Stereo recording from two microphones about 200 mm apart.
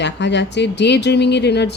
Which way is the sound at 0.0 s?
60° left (ahead or behind).